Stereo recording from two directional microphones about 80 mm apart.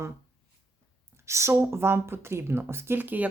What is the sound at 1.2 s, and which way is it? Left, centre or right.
Speech, right.